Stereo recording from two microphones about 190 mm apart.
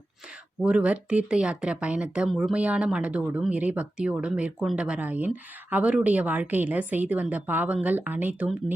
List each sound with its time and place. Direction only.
0.6 s speech: 5° right (ahead or behind)